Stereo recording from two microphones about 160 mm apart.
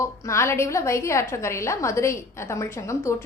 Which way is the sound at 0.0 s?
20° left (ahead or behind).